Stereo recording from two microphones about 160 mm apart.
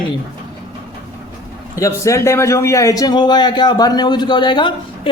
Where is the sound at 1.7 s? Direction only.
20° left (ahead or behind).